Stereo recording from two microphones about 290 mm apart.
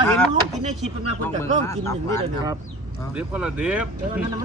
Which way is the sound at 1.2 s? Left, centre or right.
Centre.